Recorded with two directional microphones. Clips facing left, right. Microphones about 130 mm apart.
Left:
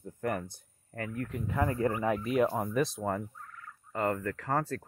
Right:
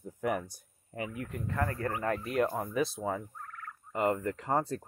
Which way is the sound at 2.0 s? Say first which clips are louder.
Even; 5° left (ahead or behind).